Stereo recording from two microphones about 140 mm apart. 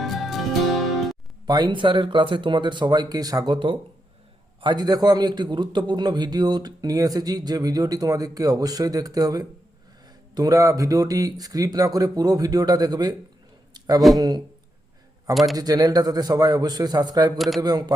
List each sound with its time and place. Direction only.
0.0 s music: centre (ahead or behind)
1.5 s a man's voice: 30° right (ahead or behind)
13.7 s a sound: 25° right (ahead or behind)
14.2 s a man's voice: 25° right (ahead or behind)
15.5 s a man's voice: 25° right (ahead or behind)
17.3 s a man's voice: centre (ahead or behind)
17.6 s a man's voice: 30° right (ahead or behind)